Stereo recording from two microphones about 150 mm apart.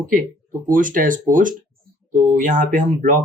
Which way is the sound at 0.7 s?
65° right (ahead or behind).